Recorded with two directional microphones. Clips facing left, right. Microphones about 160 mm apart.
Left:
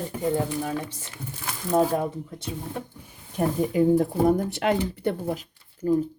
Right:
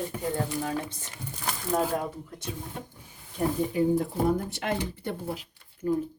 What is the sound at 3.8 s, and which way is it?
Speech, 70° left (ahead or behind).